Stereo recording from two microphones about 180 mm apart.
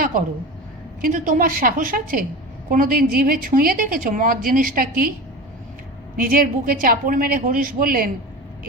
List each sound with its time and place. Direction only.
1.0 s a woman's voice: 50° right (ahead or behind)
6.1 s a woman's voice: 50° right (ahead or behind)